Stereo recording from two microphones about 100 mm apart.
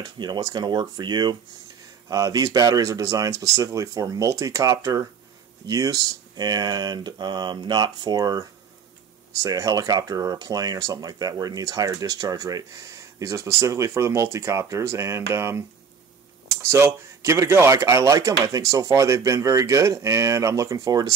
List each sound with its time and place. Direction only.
0.0 s speech: 45° right (ahead or behind)
2.0 s speech: 35° right (ahead or behind)